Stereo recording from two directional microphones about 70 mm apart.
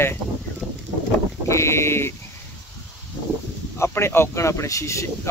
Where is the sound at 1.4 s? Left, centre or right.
Left.